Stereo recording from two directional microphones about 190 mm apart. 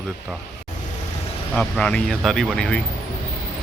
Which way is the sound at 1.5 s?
5° left (ahead or behind).